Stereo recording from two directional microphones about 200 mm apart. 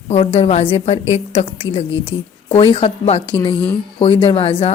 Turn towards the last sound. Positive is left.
turn(degrees=25)  # may be behind; listen again after turning